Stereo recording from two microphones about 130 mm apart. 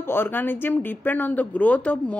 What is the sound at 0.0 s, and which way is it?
Speech, 15° left (ahead or behind).